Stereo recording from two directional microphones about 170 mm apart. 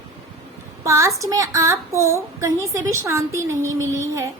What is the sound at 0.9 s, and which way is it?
A woman's voice, 20° right (ahead or behind).